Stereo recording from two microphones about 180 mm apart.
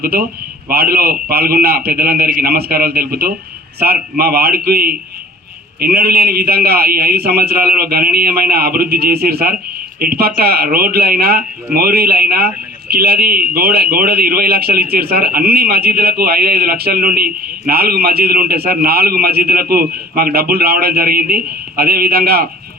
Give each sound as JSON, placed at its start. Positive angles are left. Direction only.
{"t": 0.0, "sound": "a man's voice", "side_deg": -60}